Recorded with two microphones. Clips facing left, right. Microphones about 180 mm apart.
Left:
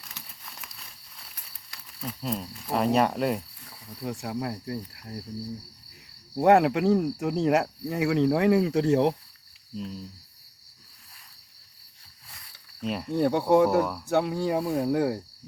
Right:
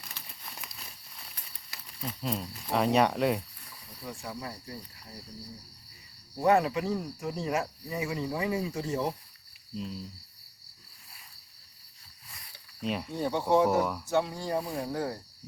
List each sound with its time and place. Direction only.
0.0 s crumpling: centre (ahead or behind)
0.6 s a sound: centre (ahead or behind)
4.0 s speech: 75° left (ahead or behind)
6.4 s speech: 75° left (ahead or behind)
9.7 s speech: centre (ahead or behind)
12.8 s speech: centre (ahead or behind)
13.1 s speech: 60° left (ahead or behind)
13.7 s speech: centre (ahead or behind)
14.1 s speech: 60° left (ahead or behind)